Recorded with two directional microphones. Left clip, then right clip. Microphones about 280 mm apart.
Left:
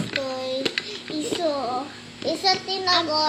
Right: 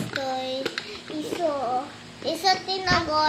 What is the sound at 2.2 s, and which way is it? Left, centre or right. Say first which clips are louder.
A child's voice: left 1 dB; centre.